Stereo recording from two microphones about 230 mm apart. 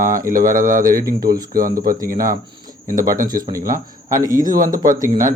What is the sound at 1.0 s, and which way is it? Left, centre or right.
Speech, centre.